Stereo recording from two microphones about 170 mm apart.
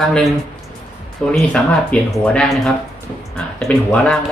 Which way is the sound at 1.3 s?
5° left (ahead or behind).